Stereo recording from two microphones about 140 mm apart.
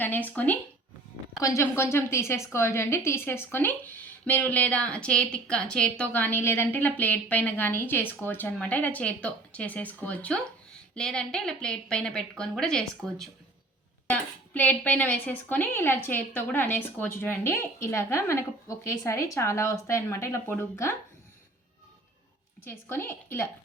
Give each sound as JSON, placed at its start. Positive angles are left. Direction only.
{"t": 0.0, "sound": "a woman's voice", "side_deg": 10}
{"t": 22.6, "sound": "a woman's voice", "side_deg": 15}